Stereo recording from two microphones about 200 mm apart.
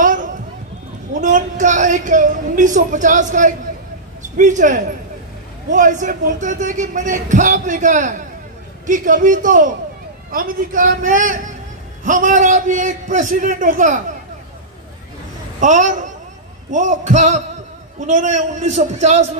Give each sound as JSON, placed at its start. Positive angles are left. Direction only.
{"t": 0.0, "sound": "a sound", "side_deg": -40}
{"t": 1.2, "sound": "a woman's voice", "side_deg": -40}
{"t": 15.6, "sound": "a man's voice", "side_deg": -40}